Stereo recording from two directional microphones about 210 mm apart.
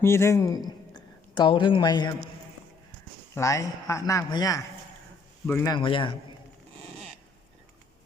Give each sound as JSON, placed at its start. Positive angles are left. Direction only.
{"t": 0.0, "sound": "speech", "side_deg": 10}
{"t": 3.3, "sound": "speech", "side_deg": 15}